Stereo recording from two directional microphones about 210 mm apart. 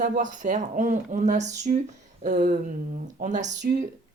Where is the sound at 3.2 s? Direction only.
35° right (ahead or behind).